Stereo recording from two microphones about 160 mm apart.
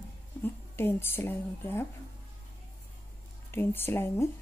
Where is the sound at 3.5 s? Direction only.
15° left (ahead or behind).